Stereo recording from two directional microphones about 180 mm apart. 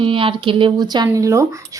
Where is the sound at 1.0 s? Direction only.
15° right (ahead or behind).